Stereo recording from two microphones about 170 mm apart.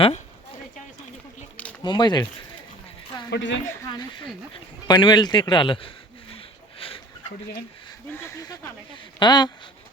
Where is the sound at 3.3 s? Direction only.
90° left.